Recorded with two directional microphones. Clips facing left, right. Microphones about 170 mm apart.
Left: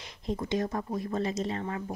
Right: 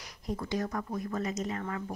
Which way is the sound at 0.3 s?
25° left (ahead or behind).